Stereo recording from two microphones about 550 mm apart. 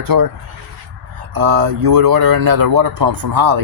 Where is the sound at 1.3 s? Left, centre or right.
Right.